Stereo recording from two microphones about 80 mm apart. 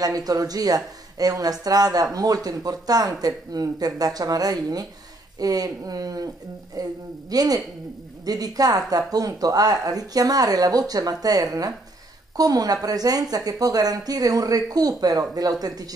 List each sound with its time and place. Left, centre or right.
0.0 s a woman's voice: right